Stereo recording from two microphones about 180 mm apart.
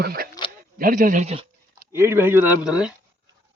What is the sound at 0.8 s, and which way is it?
Speech, 45° right (ahead or behind).